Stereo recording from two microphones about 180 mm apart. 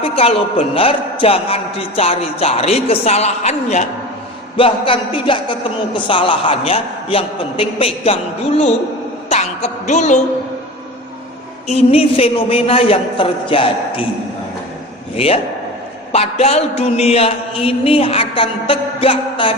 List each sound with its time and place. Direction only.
0.0 s a man's voice: 35° left (ahead or behind)
4.5 s music: 30° left (ahead or behind)
6.1 s a man's voice: 30° left (ahead or behind)
9.3 s music: 40° left (ahead or behind)
11.7 s a man's voice: 35° left (ahead or behind)
15.1 s a man's voice: 30° left (ahead or behind)